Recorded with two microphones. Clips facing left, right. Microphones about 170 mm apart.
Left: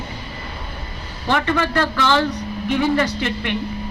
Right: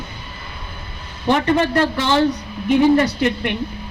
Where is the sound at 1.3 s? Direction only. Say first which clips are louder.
Right 3 dB; 20° right (ahead or behind).